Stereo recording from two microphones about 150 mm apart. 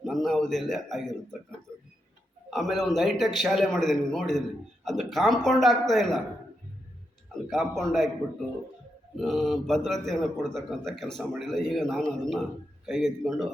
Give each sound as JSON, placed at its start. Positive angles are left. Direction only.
{"t": 0.0, "sound": "a man's voice", "side_deg": 0}
{"t": 2.5, "sound": "a man's voice", "side_deg": 0}
{"t": 7.5, "sound": "a man's voice", "side_deg": 0}
{"t": 9.1, "sound": "a man's voice", "side_deg": 0}